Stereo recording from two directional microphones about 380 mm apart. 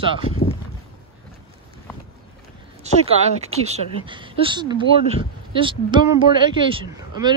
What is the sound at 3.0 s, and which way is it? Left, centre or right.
Speech, centre.